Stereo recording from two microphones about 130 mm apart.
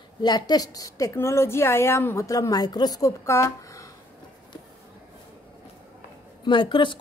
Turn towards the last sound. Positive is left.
turn(degrees=40)  # may be behind; listen again after turning